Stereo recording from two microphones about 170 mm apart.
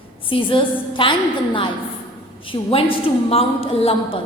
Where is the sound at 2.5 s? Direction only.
30° left (ahead or behind).